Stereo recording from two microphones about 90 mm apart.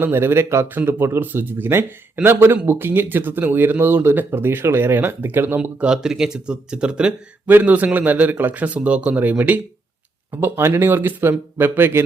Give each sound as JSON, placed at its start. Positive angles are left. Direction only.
{"t": 0.0, "sound": "a man's voice", "side_deg": -25}
{"t": 10.3, "sound": "speech", "side_deg": -25}